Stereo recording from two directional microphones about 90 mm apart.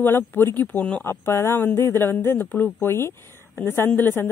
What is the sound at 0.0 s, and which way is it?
Speech, 25° left (ahead or behind).